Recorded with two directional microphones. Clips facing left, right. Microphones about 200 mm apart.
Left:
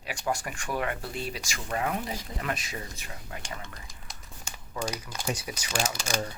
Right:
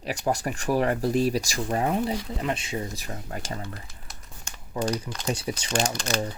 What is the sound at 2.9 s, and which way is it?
Speech, 40° right (ahead or behind).